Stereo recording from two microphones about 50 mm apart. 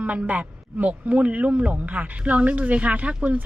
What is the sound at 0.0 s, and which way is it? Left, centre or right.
A man's voice, right.